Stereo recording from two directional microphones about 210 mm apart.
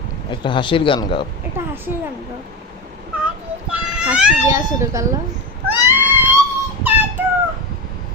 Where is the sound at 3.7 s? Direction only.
5° right (ahead or behind).